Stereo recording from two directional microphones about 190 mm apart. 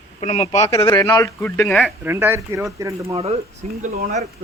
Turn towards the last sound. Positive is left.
turn(degrees=-35)  # may be behind; listen again after turning